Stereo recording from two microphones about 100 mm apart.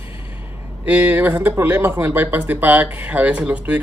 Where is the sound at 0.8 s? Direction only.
15° right (ahead or behind).